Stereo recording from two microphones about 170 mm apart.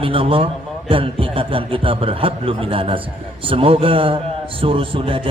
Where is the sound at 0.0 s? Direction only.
30° right (ahead or behind).